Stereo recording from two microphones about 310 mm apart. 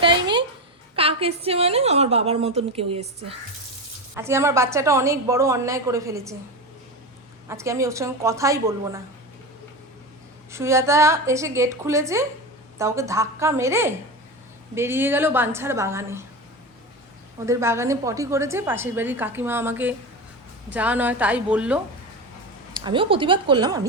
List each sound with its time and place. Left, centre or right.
0.0 s a sound: centre
0.9 s a woman's voice: centre
4.1 s a woman's voice: centre
7.4 s a woman's voice: centre
10.5 s a woman's voice: centre
17.4 s a woman's voice: centre
22.7 s a woman's voice: centre